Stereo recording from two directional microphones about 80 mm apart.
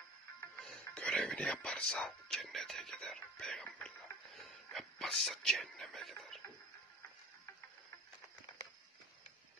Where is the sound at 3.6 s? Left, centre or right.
Centre.